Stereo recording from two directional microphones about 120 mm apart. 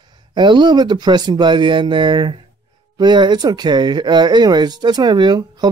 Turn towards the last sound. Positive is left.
turn(degrees=-35)  # may be behind; listen again after turning